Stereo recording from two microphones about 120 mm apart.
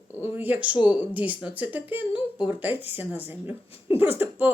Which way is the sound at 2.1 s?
40° left (ahead or behind).